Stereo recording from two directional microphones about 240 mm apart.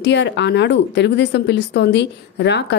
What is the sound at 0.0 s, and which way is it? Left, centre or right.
Speech, left.